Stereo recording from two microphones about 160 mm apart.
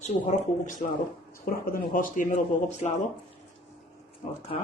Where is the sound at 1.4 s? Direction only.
65° left (ahead or behind).